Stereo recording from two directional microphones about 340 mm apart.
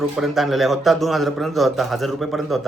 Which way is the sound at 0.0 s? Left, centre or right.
Centre.